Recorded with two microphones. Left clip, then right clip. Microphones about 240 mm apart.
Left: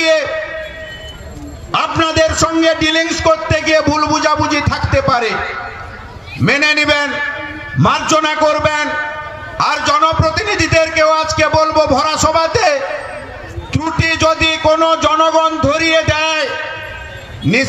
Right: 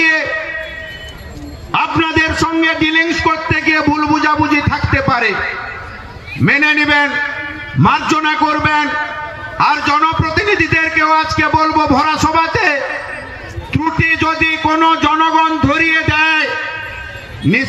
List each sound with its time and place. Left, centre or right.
1.7 s a man's voice: left
6.4 s a man's voice: left